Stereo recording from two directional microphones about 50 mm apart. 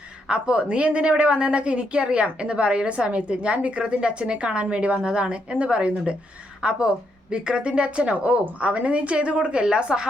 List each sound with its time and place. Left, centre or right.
0.3 s a woman's voice: right